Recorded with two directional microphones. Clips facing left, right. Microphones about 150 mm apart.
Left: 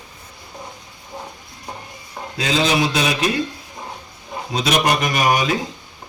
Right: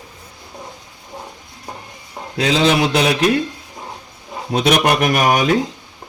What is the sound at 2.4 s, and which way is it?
Speech, 65° right (ahead or behind).